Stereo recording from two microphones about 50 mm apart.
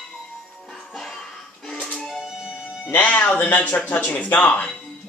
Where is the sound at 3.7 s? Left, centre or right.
Left.